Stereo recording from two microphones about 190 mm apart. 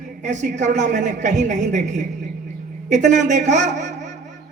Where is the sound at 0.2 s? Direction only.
40° right (ahead or behind).